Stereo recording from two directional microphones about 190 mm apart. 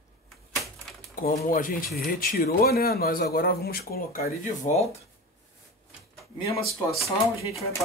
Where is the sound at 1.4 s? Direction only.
45° left (ahead or behind).